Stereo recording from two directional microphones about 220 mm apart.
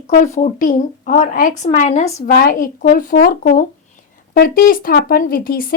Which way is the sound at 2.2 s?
40° left (ahead or behind).